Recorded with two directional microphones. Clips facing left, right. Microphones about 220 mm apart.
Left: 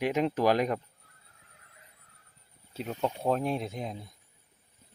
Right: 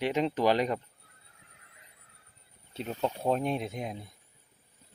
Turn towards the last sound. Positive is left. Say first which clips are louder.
# even
turn(degrees=0)  # may be behind; listen again after turning